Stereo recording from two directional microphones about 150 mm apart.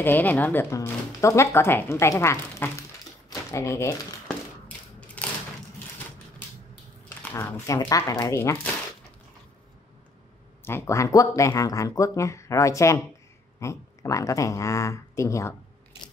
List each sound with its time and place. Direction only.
0.0 s speech: 15° left (ahead or behind)
3.3 s typewriter: 20° left (ahead or behind)
5.2 s a sound: 10° left (ahead or behind)
7.3 s speech: 20° left (ahead or behind)
10.6 s speech: 20° left (ahead or behind)